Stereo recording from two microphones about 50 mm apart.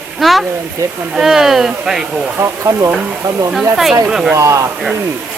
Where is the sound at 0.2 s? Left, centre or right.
Centre.